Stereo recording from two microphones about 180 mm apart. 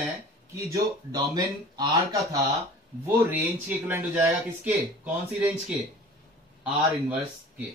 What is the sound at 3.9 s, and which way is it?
Speech, 10° right (ahead or behind).